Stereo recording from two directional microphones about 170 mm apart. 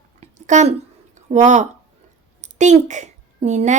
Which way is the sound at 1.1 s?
45° right (ahead or behind).